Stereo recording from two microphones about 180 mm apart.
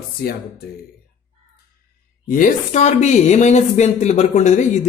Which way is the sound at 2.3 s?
45° left (ahead or behind).